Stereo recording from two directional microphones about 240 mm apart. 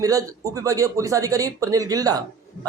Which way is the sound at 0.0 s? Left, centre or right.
Centre.